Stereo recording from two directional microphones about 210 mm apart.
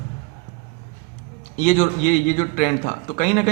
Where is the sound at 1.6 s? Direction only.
35° left (ahead or behind).